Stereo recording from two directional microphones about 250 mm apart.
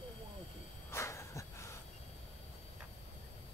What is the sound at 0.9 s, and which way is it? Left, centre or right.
Snort, centre.